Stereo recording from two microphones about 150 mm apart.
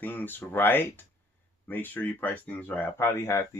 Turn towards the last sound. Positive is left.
turn(degrees=15)  # may be behind; listen again after turning